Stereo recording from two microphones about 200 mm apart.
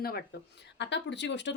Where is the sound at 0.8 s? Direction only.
60° left (ahead or behind).